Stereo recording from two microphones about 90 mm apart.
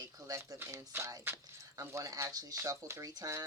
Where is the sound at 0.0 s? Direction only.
40° right (ahead or behind).